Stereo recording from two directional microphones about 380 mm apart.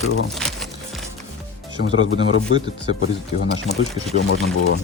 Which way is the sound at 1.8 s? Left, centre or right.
Left.